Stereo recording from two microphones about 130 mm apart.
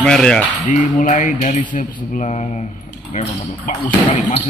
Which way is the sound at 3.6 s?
65° left (ahead or behind).